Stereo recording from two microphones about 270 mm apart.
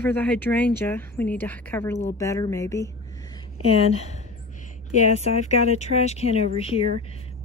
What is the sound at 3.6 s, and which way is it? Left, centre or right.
Speech, left.